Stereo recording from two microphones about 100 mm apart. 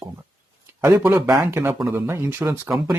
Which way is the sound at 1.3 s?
25° right (ahead or behind).